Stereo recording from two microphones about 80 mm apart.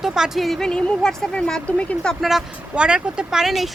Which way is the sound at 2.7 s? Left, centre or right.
Centre.